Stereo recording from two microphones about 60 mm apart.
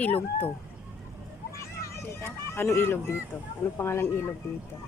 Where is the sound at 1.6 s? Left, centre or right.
Left.